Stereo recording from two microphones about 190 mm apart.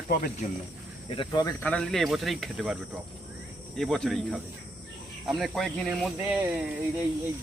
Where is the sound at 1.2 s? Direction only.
20° left (ahead or behind).